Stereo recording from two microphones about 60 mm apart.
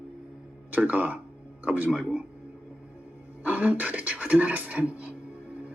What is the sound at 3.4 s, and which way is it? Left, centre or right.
Speech, right.